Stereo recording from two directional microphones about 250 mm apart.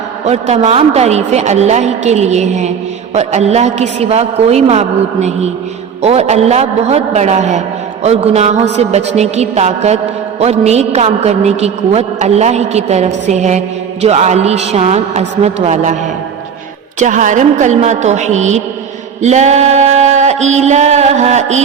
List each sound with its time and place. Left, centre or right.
0.3 s a woman's voice: right
17.0 s a woman's voice: right